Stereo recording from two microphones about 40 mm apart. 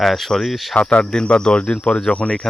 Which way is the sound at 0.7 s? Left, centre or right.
Left.